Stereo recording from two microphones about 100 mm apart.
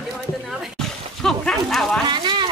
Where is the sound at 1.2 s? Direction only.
5° left (ahead or behind).